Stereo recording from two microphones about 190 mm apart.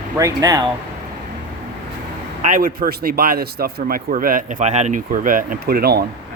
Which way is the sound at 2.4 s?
45° right (ahead or behind).